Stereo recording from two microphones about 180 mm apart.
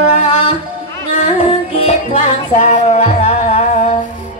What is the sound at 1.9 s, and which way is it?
Music, 40° left (ahead or behind).